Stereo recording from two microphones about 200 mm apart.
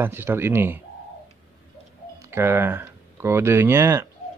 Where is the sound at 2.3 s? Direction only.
10° right (ahead or behind).